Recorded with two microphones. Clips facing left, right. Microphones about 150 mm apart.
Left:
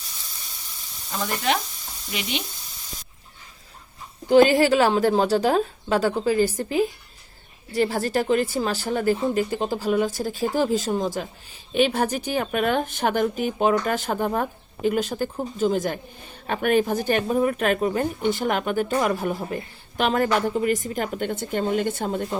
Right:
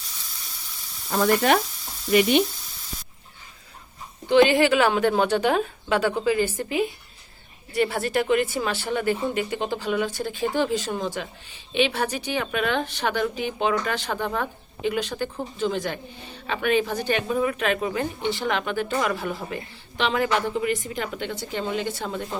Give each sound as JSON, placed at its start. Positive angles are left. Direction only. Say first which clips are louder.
{"t": 1.1, "sound": "speech", "louder": "right 6 dB", "side_deg": -50}
{"t": 4.3, "sound": "a woman's voice", "louder": "left 2 dB", "side_deg": 40}
{"t": 20.0, "sound": "a woman's voice", "louder": "left 2 dB", "side_deg": 45}